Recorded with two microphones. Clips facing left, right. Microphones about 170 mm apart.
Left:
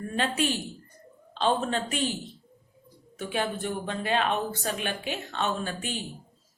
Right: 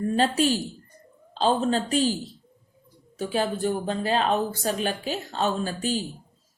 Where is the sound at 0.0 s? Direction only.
40° right (ahead or behind).